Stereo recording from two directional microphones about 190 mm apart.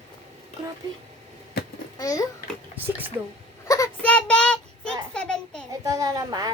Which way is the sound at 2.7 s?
10° right (ahead or behind).